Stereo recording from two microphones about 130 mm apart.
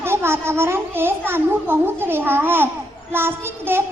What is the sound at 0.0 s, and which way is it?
A woman's voice, 20° right (ahead or behind).